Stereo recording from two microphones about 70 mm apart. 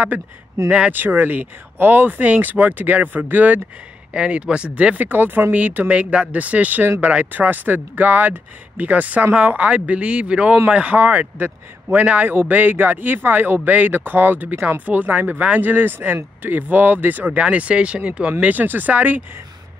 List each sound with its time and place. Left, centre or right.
0.7 s speech: centre
0.9 s speech: right
4.1 s speech: centre